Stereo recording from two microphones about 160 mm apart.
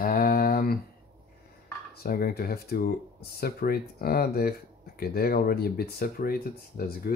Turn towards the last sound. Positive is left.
turn(degrees=65)  # may be behind; listen again after turning